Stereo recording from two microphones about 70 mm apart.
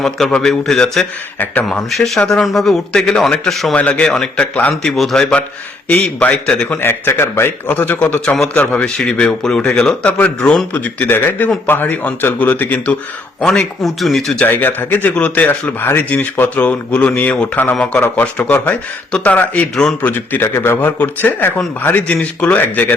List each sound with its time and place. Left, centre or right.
0.0 s speech: centre
3.8 s speech: centre
4.8 s speech: centre
5.9 s speech: centre
6.7 s a man's voice: left
7.9 s speech: centre
10.1 s speech: left
13.4 s speech: centre
14.4 s speech: left
20.0 s a man's voice: left
21.0 s speech: left